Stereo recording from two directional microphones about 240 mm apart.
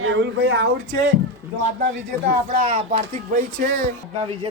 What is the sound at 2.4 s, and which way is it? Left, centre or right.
Speech, right.